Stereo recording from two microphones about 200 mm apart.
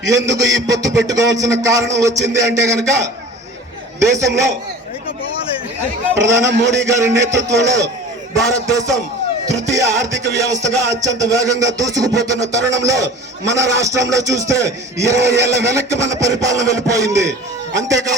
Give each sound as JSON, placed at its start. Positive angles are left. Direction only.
{"t": 0.0, "sound": "a man's voice", "side_deg": -65}
{"t": 0.7, "sound": "speech", "side_deg": -15}
{"t": 6.1, "sound": "speech", "side_deg": -15}